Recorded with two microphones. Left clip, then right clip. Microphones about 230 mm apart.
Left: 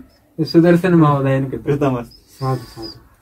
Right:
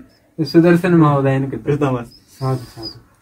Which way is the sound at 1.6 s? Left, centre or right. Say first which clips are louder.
Even; centre.